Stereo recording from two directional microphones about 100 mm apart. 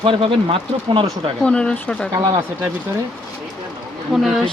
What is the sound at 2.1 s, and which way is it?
Speech, 35° right (ahead or behind).